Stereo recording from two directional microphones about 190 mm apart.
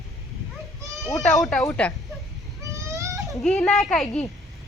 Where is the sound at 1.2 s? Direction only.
Centre (ahead or behind).